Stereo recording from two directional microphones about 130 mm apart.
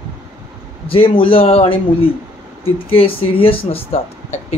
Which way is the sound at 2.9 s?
45° left (ahead or behind).